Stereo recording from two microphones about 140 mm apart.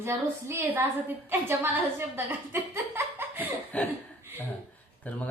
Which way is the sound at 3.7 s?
10° left (ahead or behind).